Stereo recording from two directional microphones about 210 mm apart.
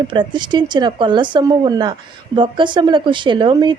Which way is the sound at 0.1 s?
20° right (ahead or behind).